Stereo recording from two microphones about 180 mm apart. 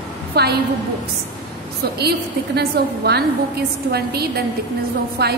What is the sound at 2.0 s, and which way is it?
A woman's voice, 65° right (ahead or behind).